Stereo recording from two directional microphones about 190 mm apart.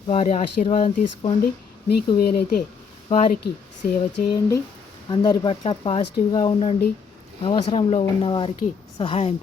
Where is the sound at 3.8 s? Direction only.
30° left (ahead or behind).